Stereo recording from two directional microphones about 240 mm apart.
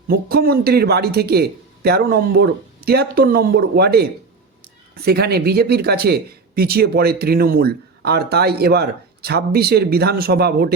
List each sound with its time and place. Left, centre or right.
0.1 s speech: right